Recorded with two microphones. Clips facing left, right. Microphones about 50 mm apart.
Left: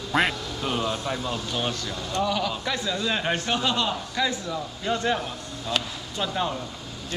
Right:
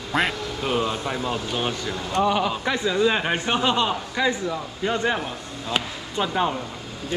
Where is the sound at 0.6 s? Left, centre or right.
Centre.